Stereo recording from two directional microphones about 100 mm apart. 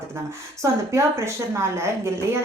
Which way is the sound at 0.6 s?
30° right (ahead or behind).